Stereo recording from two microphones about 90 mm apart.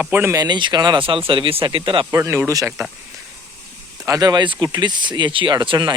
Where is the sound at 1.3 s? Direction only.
80° right; by 2.0 s 65° right (ahead or behind).